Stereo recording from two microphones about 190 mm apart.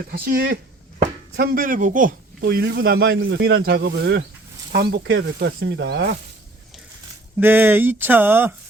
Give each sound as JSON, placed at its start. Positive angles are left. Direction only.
{"t": 0.1, "sound": "speech", "side_deg": -50}
{"t": 2.4, "sound": "speech", "side_deg": -55}
{"t": 7.3, "sound": "speech", "side_deg": -10}